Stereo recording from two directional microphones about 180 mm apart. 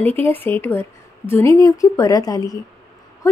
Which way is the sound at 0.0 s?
10° left (ahead or behind).